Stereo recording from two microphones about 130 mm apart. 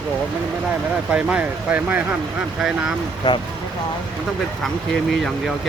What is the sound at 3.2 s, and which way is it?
Speech, 35° left (ahead or behind).